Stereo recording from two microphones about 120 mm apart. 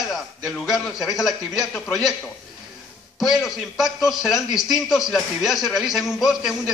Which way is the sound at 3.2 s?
Centre (ahead or behind).